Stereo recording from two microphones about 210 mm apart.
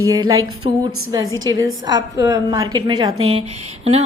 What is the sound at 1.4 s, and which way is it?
A woman's voice, 15° right (ahead or behind).